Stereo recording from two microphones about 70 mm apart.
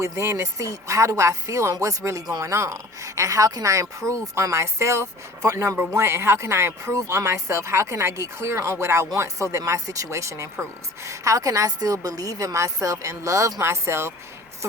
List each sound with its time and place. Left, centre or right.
0.0 s speech: right
13.6 s speech: right